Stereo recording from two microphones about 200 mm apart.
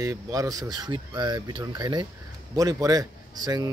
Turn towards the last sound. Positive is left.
turn(degrees=-20)  # may be behind; listen again after turning